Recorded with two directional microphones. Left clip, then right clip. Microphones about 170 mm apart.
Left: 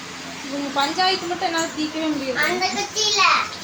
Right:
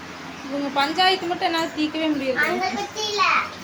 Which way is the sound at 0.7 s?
Centre (ahead or behind).